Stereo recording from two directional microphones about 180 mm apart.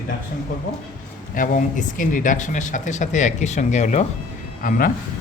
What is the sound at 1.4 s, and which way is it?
Speech, 45° left (ahead or behind).